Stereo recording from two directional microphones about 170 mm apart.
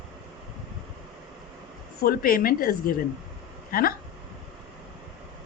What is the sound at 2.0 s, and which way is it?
A woman's voice, 60° left (ahead or behind).